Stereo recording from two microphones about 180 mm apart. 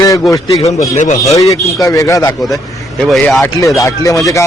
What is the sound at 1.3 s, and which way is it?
A man's voice, 20° left (ahead or behind).